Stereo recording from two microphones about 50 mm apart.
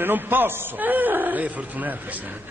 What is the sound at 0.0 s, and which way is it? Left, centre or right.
Speech, right.